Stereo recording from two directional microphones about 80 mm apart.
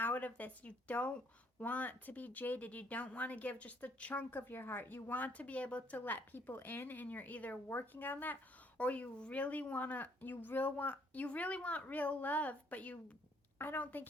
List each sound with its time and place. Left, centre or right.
0.0 s speech: left